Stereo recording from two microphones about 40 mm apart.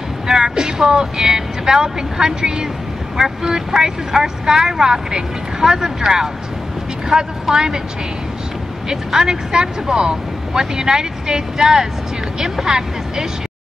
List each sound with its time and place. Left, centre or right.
0.3 s speech: centre
8.8 s speech: centre